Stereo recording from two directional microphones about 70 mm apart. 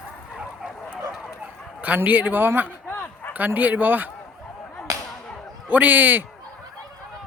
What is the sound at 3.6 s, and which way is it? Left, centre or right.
Speech, right.